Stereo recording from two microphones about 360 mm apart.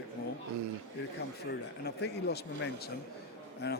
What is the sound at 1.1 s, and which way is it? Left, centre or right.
A man's voice, left.